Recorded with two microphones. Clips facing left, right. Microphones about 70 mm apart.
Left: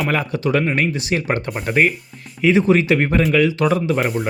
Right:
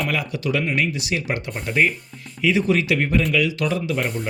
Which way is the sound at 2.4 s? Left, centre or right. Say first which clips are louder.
Left 5 dB; left.